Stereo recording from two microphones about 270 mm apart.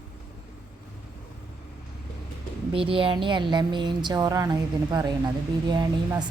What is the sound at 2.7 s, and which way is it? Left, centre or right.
A woman's voice, centre.